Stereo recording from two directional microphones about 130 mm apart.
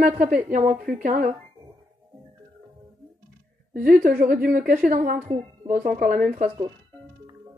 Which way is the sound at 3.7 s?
90° right.